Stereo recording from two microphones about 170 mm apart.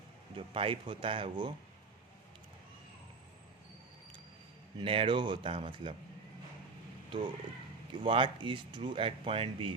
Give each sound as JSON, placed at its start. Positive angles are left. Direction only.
{"t": 0.3, "sound": "speech", "side_deg": -30}
{"t": 4.8, "sound": "speech", "side_deg": -30}
{"t": 7.1, "sound": "speech", "side_deg": -30}